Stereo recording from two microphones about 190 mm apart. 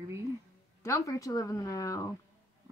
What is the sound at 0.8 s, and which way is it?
Speech, 15° left (ahead or behind).